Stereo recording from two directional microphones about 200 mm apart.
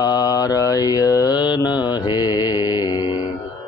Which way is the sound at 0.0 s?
20° left (ahead or behind).